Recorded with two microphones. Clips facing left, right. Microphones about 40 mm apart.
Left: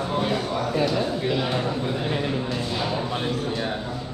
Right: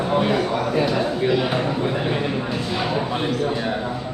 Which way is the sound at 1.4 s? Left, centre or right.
Right.